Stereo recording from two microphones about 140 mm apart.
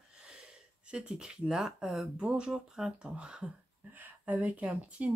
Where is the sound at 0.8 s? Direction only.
5° right (ahead or behind).